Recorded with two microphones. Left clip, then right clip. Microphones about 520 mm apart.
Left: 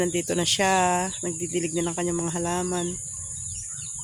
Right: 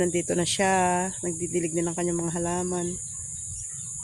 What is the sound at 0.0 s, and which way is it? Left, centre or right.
Speech, left.